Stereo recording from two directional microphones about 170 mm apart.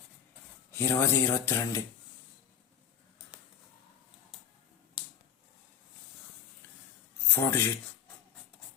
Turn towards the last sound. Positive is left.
turn(degrees=15)  # may be behind; listen again after turning